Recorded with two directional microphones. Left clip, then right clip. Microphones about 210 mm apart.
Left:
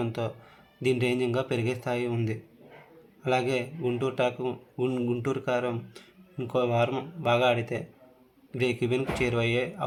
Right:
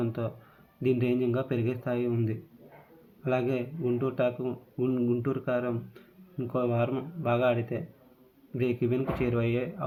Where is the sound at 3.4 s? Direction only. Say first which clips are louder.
Left 2 dB; 25° left (ahead or behind).